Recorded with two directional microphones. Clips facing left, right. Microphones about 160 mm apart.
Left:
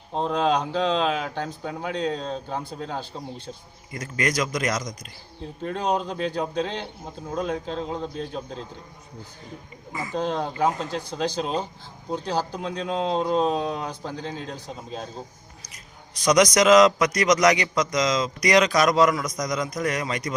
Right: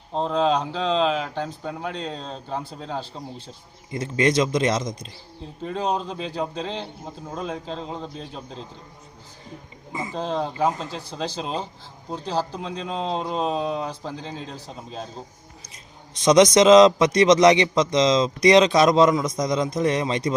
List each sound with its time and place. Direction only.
0.1 s speech: 5° left (ahead or behind)
3.9 s a man's voice: 25° right (ahead or behind)
5.6 s speech: centre (ahead or behind)
9.9 s a man's voice: 25° right (ahead or behind)
10.2 s speech: centre (ahead or behind)
15.7 s a man's voice: 25° right (ahead or behind)